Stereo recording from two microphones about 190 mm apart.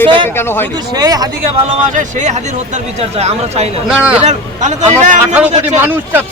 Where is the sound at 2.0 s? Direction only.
40° right (ahead or behind).